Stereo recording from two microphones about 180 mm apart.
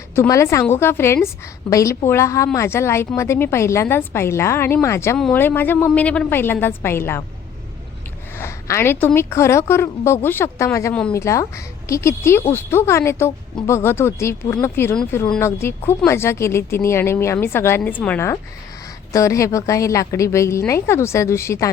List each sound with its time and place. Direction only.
0.2 s speech: 15° left (ahead or behind)
8.4 s speech: 15° left (ahead or behind)